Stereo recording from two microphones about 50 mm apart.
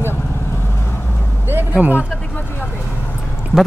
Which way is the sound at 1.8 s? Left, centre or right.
Right.